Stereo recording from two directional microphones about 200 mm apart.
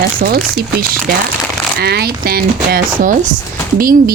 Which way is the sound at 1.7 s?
55° right (ahead or behind).